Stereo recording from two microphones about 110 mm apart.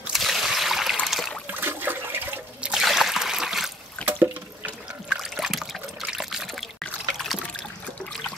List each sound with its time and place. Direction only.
0.0 s a sound: centre (ahead or behind)
1.5 s trickle: 20° right (ahead or behind)
2.7 s trickle: centre (ahead or behind)
4.0 s water: 20° right (ahead or behind)
5.2 s trickle: centre (ahead or behind)